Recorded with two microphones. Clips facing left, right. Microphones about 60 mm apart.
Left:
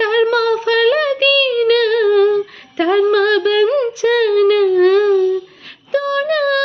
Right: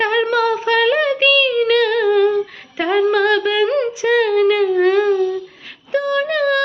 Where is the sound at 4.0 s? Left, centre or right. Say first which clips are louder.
Left 1 dB; right.